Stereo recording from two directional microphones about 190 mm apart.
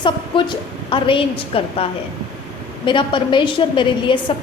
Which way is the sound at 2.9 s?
25° left (ahead or behind).